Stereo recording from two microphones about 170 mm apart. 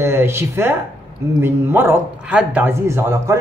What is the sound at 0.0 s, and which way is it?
Speech, 15° right (ahead or behind).